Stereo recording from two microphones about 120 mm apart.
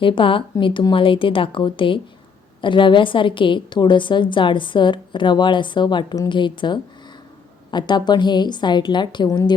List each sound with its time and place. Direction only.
0.0 s a woman's voice: 45° left (ahead or behind)